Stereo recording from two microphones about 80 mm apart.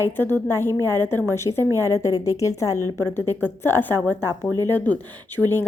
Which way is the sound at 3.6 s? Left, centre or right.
Left.